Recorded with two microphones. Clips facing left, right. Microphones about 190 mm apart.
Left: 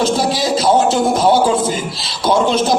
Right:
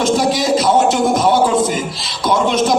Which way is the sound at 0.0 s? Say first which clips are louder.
Right 1 dB; 30° left (ahead or behind).